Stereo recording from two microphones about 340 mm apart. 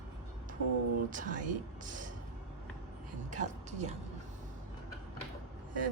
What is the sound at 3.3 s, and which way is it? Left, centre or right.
Speech, right.